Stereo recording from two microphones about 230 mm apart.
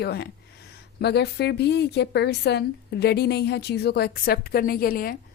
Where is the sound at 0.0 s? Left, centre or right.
Left.